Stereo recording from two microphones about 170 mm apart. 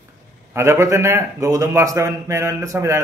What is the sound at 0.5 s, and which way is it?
A man's voice, 15° right (ahead or behind).